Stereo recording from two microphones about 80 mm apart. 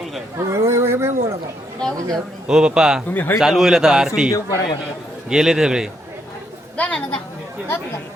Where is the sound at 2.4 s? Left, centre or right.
Centre.